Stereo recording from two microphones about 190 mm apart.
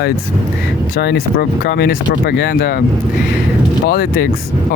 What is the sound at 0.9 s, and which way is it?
Speech, 60° left (ahead or behind).